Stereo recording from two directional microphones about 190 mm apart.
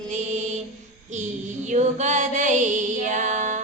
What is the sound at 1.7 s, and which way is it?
Female singing, 40° right (ahead or behind).